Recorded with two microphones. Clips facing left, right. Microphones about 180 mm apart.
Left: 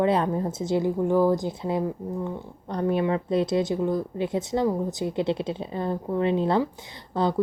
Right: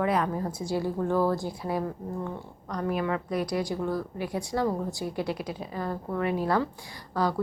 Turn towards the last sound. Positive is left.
turn(degrees=25)  # may be behind; listen again after turning